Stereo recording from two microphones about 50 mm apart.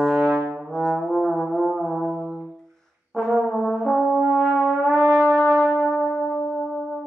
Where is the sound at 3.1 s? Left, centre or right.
Centre.